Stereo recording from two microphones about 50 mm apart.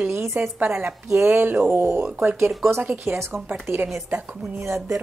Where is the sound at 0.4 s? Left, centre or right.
Right.